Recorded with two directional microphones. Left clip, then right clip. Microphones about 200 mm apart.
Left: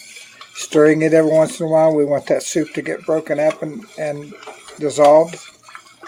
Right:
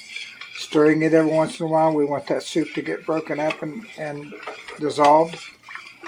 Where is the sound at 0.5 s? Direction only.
40° left (ahead or behind).